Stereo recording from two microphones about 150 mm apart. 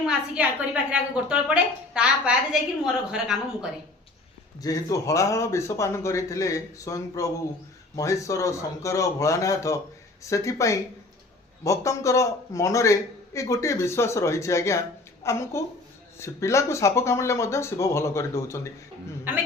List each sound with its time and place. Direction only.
0.0 s a woman's voice: 5° right (ahead or behind)
4.6 s a man's voice: 25° left (ahead or behind)